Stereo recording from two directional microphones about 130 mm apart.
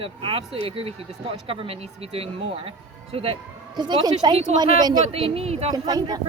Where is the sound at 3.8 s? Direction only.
35° right (ahead or behind).